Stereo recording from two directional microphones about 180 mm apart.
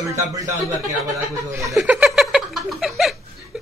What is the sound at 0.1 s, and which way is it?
Speech, 15° right (ahead or behind).